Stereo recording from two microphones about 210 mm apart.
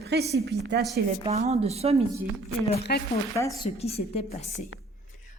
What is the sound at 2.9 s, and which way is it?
Speech, 45° left (ahead or behind).